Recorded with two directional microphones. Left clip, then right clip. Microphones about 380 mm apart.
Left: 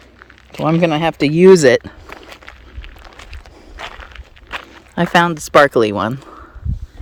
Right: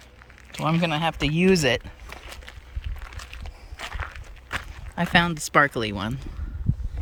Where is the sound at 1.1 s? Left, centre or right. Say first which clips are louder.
Left 10 dB; left.